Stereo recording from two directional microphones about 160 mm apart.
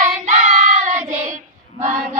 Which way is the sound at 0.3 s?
50° right (ahead or behind).